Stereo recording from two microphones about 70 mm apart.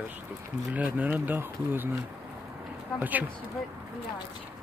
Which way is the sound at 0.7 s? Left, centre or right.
Right.